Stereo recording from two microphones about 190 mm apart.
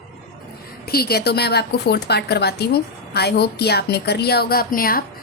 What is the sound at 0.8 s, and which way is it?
A woman's voice, 55° left (ahead or behind).